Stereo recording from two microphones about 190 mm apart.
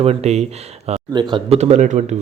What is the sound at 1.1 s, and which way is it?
A man's voice, 25° right (ahead or behind).